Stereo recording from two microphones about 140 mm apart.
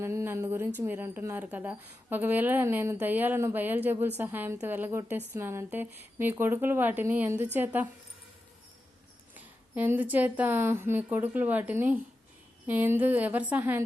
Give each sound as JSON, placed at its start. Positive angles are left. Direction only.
{"t": 0.0, "sound": "a woman's voice", "side_deg": -20}
{"t": 9.3, "sound": "a woman's voice", "side_deg": -15}